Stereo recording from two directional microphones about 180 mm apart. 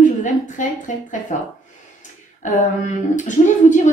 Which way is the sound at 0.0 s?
45° left (ahead or behind).